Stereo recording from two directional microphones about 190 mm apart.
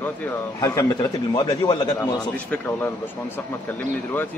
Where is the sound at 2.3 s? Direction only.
5° left (ahead or behind).